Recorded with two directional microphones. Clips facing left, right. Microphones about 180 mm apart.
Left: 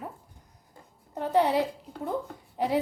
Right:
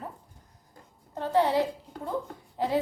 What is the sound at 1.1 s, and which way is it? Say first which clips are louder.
Speech: left 1 dB; 20° left (ahead or behind).